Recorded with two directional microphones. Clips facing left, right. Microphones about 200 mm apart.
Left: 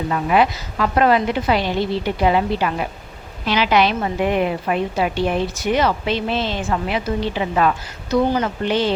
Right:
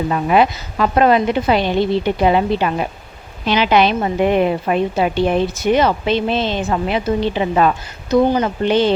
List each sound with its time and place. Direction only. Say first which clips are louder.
0.1 s a woman's voice: right 2 dB; 25° right (ahead or behind)